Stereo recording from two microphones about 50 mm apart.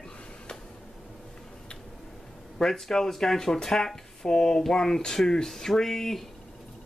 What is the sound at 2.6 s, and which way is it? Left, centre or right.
Speech, centre.